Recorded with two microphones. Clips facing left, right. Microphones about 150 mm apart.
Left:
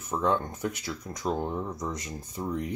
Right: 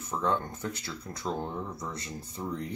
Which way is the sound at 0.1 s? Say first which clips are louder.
Left 3 dB; 15° left (ahead or behind).